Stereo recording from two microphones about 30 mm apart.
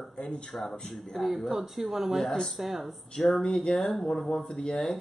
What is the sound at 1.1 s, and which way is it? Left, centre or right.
Speech, centre.